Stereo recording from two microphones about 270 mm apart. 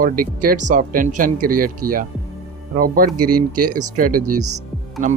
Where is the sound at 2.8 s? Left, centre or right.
Right.